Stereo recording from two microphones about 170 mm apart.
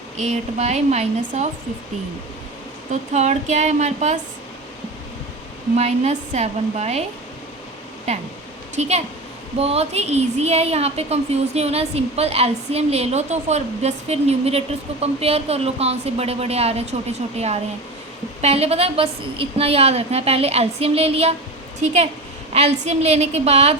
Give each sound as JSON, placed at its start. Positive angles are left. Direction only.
{"t": 0.2, "sound": "a woman's voice", "side_deg": -40}
{"t": 2.9, "sound": "speech", "side_deg": -45}
{"t": 5.7, "sound": "a woman's voice", "side_deg": -40}
{"t": 8.7, "sound": "a woman's voice", "side_deg": -40}